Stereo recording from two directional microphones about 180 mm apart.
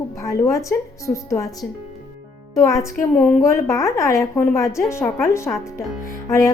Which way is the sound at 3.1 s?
5° left (ahead or behind).